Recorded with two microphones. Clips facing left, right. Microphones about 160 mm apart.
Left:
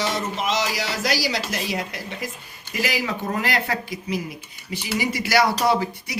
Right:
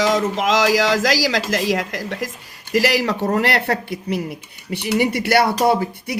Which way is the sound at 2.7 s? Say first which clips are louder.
Right 8 dB; 75° right (ahead or behind).